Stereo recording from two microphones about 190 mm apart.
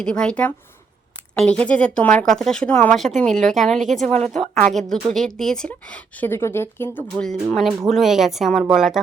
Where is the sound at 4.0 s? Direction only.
35° right (ahead or behind).